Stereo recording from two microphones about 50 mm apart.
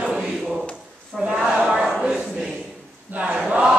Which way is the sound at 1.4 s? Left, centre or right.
Centre.